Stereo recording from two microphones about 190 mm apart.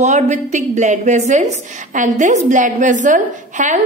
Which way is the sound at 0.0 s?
40° right (ahead or behind).